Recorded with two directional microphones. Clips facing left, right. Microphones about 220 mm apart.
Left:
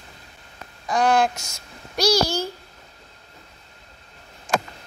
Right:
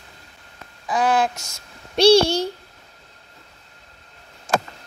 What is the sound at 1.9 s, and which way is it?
Speech, 30° right (ahead or behind).